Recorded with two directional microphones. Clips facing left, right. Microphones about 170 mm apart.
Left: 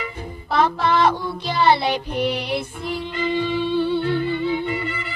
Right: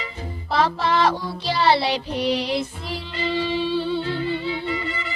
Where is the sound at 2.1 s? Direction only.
55° left (ahead or behind).